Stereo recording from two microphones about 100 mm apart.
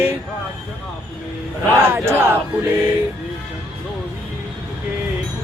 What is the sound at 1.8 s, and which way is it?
Mantra, 20° right (ahead or behind).